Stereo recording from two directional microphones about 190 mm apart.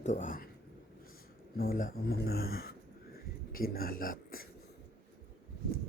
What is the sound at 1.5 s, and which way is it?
Speech, 50° left (ahead or behind).